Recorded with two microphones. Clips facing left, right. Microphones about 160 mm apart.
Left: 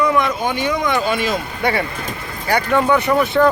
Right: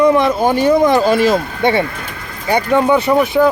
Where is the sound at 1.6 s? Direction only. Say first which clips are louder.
Right 5 dB; 25° right (ahead or behind).